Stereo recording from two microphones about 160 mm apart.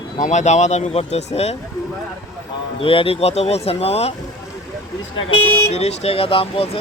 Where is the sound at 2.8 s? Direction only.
35° left (ahead or behind).